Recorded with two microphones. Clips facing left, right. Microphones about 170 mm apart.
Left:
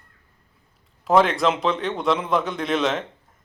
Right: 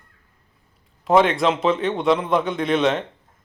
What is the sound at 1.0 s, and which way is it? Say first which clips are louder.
Speech: right 1 dB; centre (ahead or behind).